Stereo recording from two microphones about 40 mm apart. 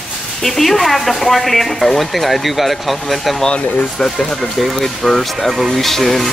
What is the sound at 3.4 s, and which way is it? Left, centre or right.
Speech, centre.